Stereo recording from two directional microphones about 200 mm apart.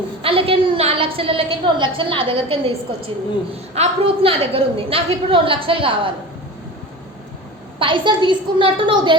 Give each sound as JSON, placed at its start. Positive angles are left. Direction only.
{"t": 0.2, "sound": "a woman's voice", "side_deg": -25}
{"t": 3.8, "sound": "a woman's voice", "side_deg": -30}
{"t": 7.8, "sound": "a woman's voice", "side_deg": -25}